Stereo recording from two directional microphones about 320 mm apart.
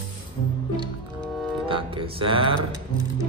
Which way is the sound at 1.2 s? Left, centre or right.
Centre.